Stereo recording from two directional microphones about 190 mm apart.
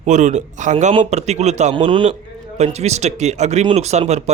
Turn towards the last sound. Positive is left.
turn(degrees=-35)  # may be behind; listen again after turning